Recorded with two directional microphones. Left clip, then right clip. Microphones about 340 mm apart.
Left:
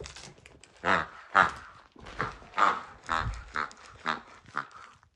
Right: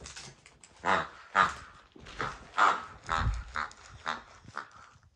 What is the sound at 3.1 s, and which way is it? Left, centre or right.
Dog, left.